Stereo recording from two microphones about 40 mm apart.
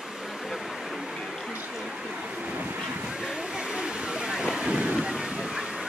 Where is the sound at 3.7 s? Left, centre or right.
Right.